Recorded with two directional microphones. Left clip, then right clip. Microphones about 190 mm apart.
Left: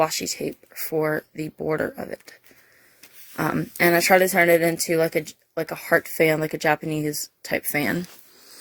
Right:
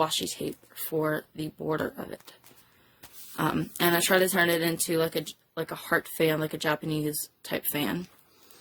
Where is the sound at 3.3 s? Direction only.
30° left (ahead or behind).